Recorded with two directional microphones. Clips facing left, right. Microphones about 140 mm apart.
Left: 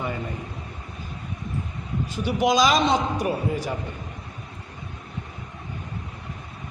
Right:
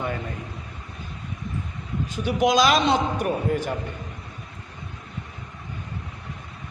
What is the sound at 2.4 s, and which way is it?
Speech, centre (ahead or behind).